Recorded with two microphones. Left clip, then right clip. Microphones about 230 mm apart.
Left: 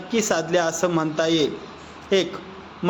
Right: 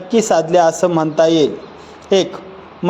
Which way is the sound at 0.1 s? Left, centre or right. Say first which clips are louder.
Right 8 dB; centre.